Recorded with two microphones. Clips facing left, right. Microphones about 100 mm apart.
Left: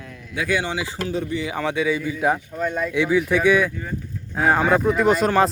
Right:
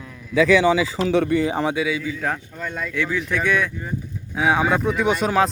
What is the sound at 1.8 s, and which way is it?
Speech, centre (ahead or behind).